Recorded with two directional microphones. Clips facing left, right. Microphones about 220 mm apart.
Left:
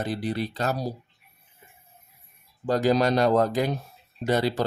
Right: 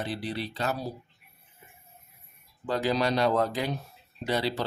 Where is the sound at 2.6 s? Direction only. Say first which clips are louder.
Left 5 dB; 45° left (ahead or behind).